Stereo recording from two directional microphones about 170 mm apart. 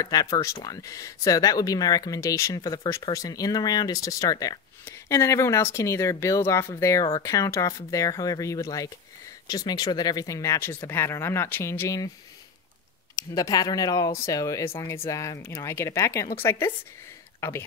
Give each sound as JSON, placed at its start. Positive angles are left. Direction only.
{"t": 0.0, "sound": "speech", "side_deg": 20}
{"t": 13.1, "sound": "speech", "side_deg": 20}